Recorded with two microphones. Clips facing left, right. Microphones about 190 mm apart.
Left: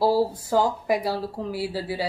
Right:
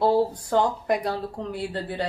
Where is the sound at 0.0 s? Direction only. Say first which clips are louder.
Even; 5° left (ahead or behind).